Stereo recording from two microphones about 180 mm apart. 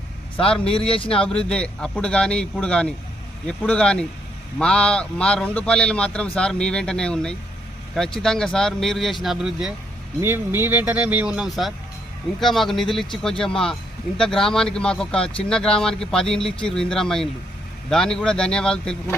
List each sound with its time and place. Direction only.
0.5 s a man's voice: 5° left (ahead or behind)
0.9 s speech: 30° left (ahead or behind)
1.1 s a man's voice: 5° left (ahead or behind)